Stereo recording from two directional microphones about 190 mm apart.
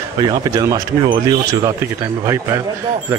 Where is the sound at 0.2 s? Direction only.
20° right (ahead or behind).